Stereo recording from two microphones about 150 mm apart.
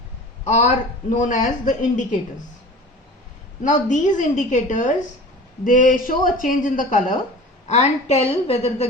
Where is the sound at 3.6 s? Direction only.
55° left (ahead or behind).